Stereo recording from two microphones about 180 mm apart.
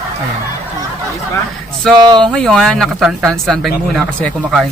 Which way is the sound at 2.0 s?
25° right (ahead or behind).